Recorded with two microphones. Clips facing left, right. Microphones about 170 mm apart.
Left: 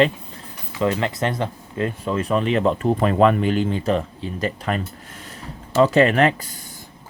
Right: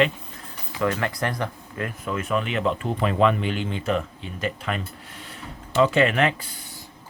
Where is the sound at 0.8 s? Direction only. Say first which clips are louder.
Left 3 dB; 20° left (ahead or behind); by 6.5 s 40° left (ahead or behind).